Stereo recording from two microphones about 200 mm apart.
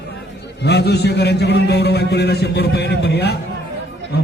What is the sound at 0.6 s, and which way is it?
A man's voice, 55° left (ahead or behind).